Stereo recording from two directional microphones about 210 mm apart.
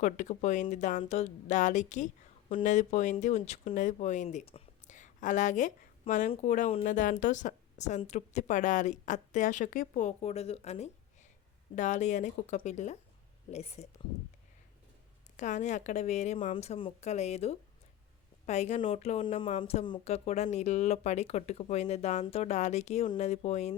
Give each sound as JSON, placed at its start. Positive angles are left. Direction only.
{"t": 0.0, "sound": "speech", "side_deg": 35}
{"t": 15.4, "sound": "speech", "side_deg": 35}